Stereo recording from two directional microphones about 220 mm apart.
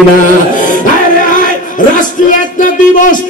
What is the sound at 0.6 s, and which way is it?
Music, 35° left (ahead or behind).